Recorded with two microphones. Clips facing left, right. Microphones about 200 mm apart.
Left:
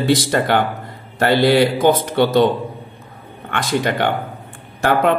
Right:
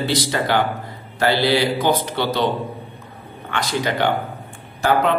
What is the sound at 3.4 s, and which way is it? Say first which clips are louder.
Speech: left 3 dB; 50° left (ahead or behind).